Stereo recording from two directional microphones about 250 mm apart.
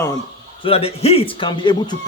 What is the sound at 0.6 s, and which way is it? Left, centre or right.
A man's voice, left.